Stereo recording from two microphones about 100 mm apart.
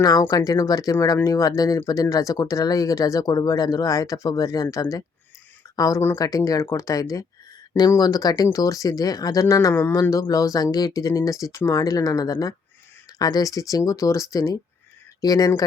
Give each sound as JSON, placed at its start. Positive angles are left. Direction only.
{"t": 0.0, "sound": "speech", "side_deg": 40}